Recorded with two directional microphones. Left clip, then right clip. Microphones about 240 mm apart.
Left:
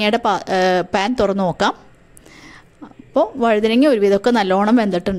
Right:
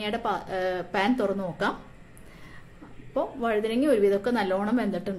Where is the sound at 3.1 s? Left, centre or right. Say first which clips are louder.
Left 11 dB; left.